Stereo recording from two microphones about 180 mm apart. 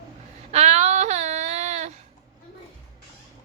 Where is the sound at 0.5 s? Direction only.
35° right (ahead or behind).